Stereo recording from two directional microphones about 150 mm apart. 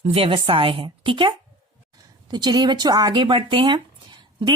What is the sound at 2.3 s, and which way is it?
Speech, 30° right (ahead or behind).